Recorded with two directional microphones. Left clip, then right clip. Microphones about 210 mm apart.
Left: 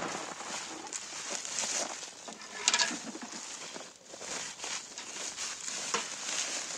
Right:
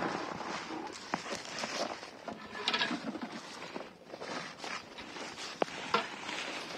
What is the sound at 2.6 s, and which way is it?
Pigeon, 20° left (ahead or behind).